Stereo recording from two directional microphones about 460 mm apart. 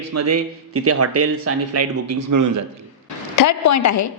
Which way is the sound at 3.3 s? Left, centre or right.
Left.